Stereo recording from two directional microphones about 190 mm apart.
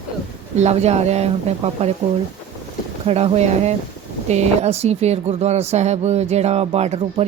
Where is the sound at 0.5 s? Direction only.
35° right (ahead or behind).